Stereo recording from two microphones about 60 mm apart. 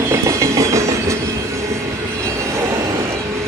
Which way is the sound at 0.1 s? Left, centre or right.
Right.